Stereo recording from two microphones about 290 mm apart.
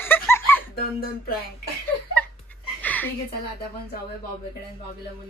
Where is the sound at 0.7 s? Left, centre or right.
Left.